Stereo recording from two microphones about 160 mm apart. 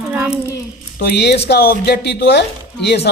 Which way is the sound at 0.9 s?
90° left.